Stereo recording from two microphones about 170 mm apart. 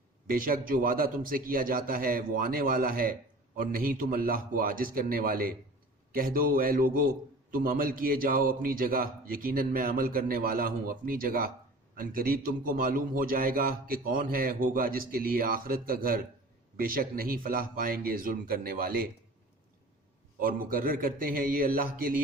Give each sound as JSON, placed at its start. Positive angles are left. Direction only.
{"t": 0.3, "sound": "a man's voice", "side_deg": -55}
{"t": 20.4, "sound": "a man's voice", "side_deg": -55}